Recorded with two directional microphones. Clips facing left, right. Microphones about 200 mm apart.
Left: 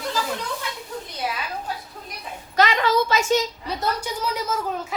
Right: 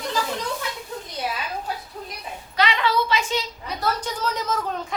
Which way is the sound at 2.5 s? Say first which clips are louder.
Left 3 dB; 45° left (ahead or behind).